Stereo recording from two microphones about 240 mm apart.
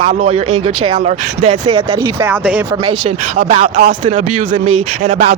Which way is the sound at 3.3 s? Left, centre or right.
Right.